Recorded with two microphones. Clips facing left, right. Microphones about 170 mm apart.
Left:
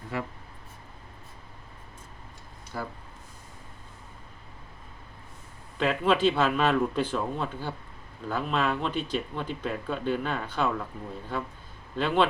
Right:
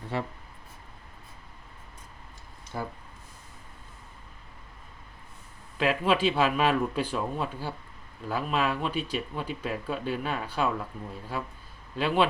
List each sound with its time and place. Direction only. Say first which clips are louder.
0.1 s speech: right 1 dB; 30° right (ahead or behind)
5.7 s speech: left 1 dB; 5° right (ahead or behind)